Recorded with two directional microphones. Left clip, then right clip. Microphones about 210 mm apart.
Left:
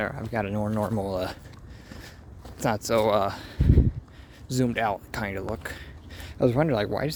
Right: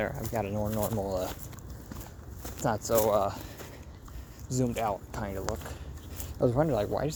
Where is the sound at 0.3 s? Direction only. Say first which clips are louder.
Left 4 dB; 35° left (ahead or behind).